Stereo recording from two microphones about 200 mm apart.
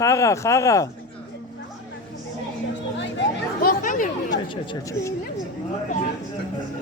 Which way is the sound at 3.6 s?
45° left (ahead or behind).